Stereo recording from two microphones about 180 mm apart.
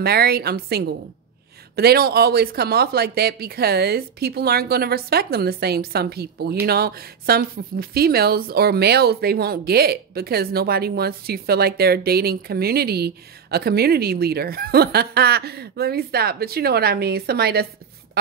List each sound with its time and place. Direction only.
0.0 s speech: 60° right (ahead or behind)